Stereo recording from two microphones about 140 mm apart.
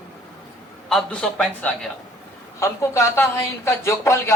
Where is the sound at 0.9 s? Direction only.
5° left (ahead or behind).